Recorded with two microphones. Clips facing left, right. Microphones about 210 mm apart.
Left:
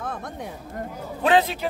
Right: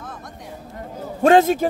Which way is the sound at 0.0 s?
55° left (ahead or behind).